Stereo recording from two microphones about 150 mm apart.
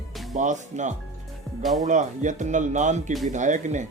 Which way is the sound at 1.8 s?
55° right (ahead or behind).